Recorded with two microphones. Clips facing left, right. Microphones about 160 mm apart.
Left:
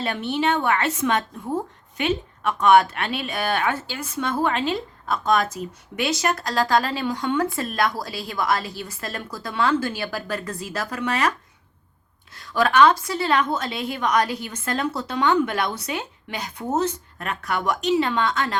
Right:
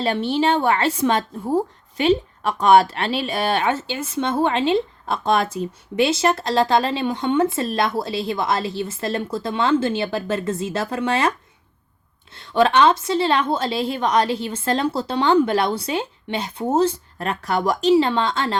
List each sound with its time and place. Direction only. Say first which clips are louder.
0.0 s a woman's voice: right 4 dB; 30° right (ahead or behind)